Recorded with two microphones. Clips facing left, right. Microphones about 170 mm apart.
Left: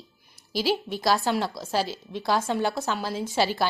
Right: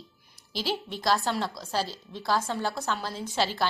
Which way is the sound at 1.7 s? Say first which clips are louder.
Left 4 dB; 15° left (ahead or behind).